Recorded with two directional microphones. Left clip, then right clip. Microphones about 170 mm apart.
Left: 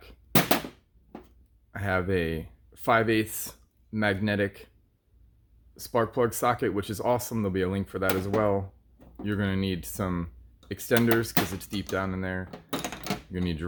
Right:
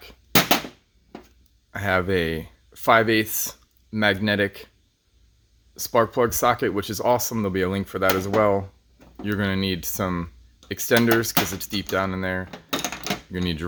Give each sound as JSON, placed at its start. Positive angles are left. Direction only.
{"t": 1.7, "sound": "speech", "side_deg": -20}
{"t": 5.7, "sound": "speech", "side_deg": -20}